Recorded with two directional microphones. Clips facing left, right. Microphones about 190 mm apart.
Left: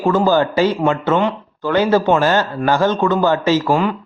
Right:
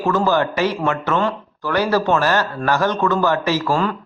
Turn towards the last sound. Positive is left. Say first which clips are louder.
# left 3 dB
turn(degrees=15)  # may be behind; listen again after turning